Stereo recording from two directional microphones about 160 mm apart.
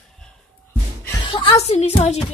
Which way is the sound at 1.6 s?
40° left (ahead or behind).